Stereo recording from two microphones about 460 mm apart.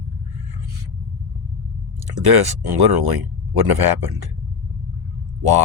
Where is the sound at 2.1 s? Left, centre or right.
Right.